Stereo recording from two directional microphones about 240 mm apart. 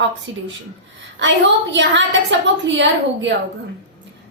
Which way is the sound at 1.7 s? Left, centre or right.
Right.